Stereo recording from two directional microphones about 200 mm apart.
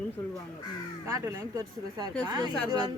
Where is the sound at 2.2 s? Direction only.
20° right (ahead or behind).